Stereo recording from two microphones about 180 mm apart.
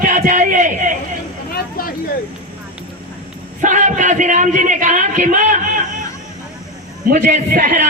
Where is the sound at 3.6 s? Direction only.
45° right (ahead or behind).